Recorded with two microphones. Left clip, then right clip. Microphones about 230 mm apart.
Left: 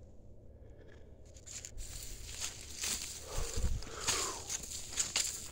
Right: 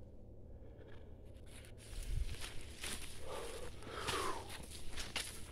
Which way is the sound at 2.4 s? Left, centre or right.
Left.